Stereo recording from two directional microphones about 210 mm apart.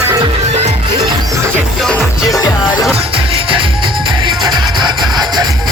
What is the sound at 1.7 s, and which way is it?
Music, centre (ahead or behind).